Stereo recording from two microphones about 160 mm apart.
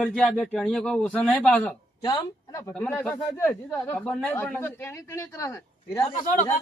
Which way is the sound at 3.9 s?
5° left (ahead or behind).